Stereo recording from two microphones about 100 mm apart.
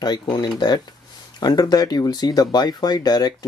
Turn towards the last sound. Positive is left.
turn(degrees=40)  # may be behind; listen again after turning